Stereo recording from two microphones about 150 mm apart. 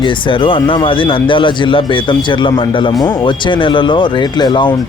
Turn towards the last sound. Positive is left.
turn(degrees=30)  # may be behind; listen again after turning